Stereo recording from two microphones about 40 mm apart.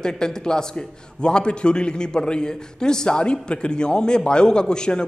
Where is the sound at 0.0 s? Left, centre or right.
Centre.